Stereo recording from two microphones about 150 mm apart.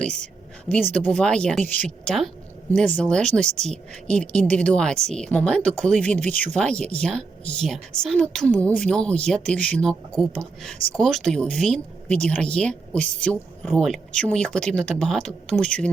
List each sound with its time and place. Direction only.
0.0 s a sound: 5° left (ahead or behind)
0.8 s speech: 50° right (ahead or behind)
1.0 s speech: 5° left (ahead or behind)